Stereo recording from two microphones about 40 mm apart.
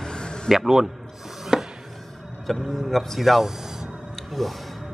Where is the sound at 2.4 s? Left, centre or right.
Centre.